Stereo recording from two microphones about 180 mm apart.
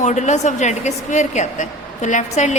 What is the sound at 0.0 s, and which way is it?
A woman's voice, 40° left (ahead or behind).